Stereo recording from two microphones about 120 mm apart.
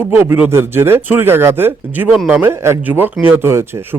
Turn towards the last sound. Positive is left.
turn(degrees=-20)  # may be behind; listen again after turning